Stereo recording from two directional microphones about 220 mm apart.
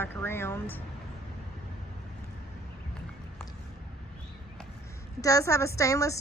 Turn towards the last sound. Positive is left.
turn(degrees=15)  # may be behind; listen again after turning